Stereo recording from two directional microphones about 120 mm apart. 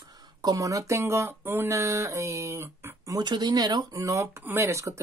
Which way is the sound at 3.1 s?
35° right (ahead or behind).